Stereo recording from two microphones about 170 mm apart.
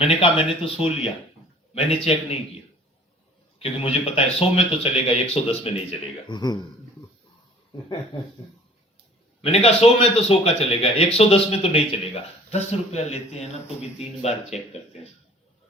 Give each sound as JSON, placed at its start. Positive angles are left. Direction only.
{"t": 0.0, "sound": "speech", "side_deg": 35}
{"t": 3.6, "sound": "speech", "side_deg": 35}
{"t": 6.2, "sound": "speech", "side_deg": 25}
{"t": 9.4, "sound": "speech", "side_deg": 35}